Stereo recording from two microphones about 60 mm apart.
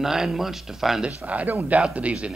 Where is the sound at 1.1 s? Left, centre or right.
Right.